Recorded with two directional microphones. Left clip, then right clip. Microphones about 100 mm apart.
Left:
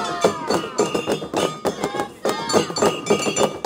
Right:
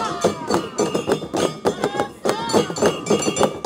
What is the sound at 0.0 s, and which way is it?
Music, 20° left (ahead or behind).